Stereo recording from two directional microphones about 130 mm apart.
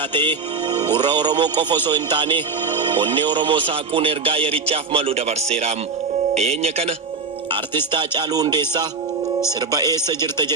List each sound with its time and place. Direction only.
0.1 s speech: 35° right (ahead or behind); by 6.9 s 55° right (ahead or behind)
7.9 s speech: 35° right (ahead or behind)